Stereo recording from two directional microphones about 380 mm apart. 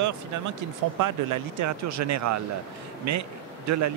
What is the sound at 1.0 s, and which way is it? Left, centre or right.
Speech, right.